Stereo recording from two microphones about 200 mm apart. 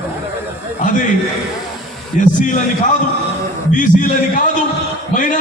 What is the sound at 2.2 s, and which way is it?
Speech, 40° left (ahead or behind).